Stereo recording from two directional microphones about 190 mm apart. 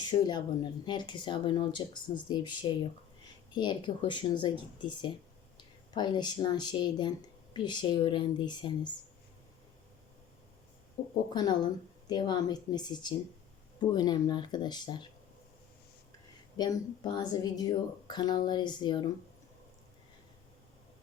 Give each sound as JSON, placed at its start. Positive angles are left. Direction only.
{"t": 0.0, "sound": "speech", "side_deg": 20}
{"t": 11.3, "sound": "speech", "side_deg": 25}
{"t": 16.6, "sound": "speech", "side_deg": 20}